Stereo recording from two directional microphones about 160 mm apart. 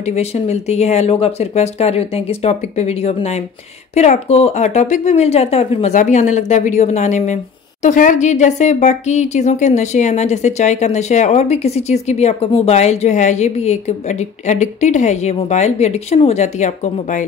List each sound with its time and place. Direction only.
0.0 s speech: 45° left (ahead or behind)